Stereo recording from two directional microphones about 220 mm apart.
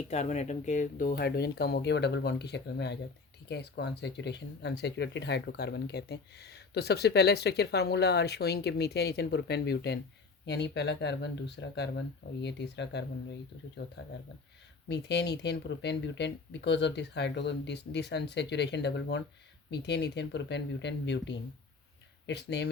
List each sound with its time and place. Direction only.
0.1 s speech: 30° left (ahead or behind); by 13.1 s 50° left (ahead or behind)
14.8 s speech: 50° left (ahead or behind)